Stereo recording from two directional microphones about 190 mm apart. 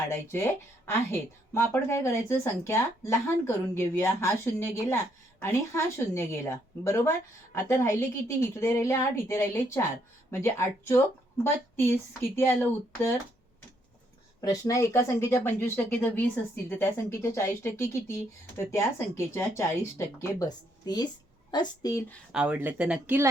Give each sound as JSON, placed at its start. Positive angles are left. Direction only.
{"t": 0.1, "sound": "speech", "side_deg": 15}
{"t": 14.4, "sound": "a woman's voice", "side_deg": 15}
{"t": 22.3, "sound": "speech", "side_deg": -5}